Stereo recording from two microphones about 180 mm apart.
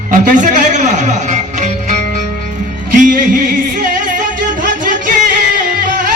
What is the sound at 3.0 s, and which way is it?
Speech, 45° right (ahead or behind).